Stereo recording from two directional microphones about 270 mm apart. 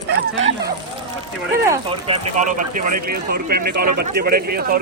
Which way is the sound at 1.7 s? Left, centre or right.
Right.